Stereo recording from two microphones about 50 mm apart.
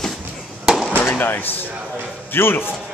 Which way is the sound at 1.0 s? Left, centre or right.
Left.